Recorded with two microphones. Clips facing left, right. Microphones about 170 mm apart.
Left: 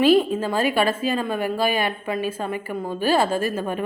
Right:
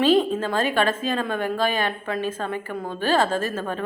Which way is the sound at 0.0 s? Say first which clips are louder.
Left 2 dB; 10° left (ahead or behind).